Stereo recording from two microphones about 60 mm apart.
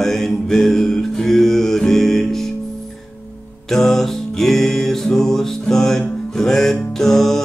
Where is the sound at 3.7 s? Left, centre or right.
Centre.